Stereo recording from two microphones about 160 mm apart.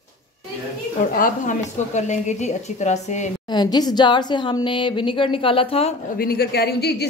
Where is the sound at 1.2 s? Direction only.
50° left (ahead or behind).